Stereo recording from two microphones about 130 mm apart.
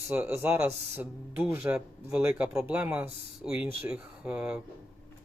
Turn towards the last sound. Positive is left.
turn(degrees=-10)  # may be behind; listen again after turning